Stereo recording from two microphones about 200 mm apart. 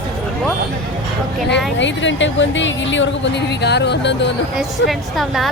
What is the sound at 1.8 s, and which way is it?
A woman's voice, 65° left (ahead or behind).